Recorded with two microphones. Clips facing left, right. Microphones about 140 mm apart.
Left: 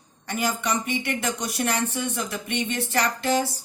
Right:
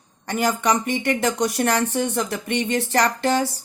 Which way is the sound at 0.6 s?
70° right (ahead or behind).